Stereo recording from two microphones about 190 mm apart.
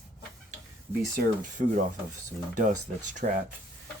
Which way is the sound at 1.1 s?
45° right (ahead or behind).